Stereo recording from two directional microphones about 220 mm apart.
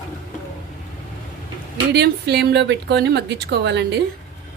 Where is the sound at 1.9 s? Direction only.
50° right (ahead or behind).